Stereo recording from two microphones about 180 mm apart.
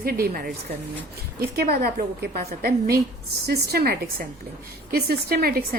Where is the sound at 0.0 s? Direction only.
55° right (ahead or behind).